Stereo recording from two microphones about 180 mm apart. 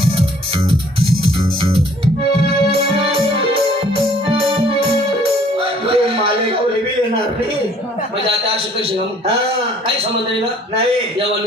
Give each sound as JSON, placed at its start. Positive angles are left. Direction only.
{"t": 3.0, "sound": "music", "side_deg": -30}